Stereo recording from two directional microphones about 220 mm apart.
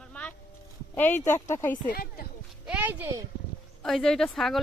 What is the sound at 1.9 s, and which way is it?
Speech, 40° left (ahead or behind).